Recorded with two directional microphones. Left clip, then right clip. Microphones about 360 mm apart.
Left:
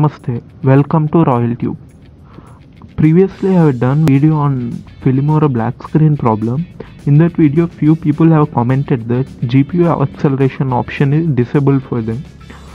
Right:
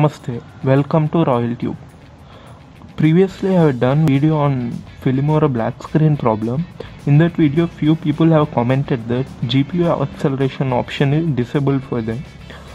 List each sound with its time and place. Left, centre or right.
0.0 s speech: centre
3.0 s speech: centre